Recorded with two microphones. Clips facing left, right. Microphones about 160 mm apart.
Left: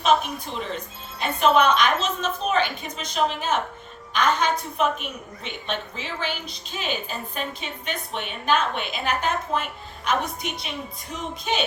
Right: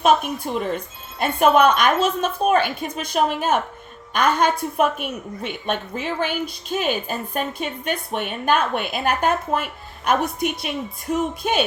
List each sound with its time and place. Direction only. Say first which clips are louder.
0.0 s a woman's voice: right 3 dB; 50° right (ahead or behind)